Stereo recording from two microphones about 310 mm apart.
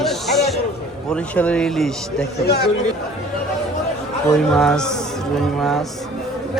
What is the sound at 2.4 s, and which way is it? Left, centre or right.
Speech, left.